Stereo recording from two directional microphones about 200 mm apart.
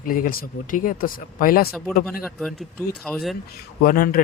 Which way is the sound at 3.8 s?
50° left (ahead or behind).